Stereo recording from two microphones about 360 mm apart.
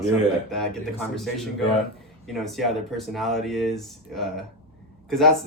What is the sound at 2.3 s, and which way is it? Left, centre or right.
Speech, centre.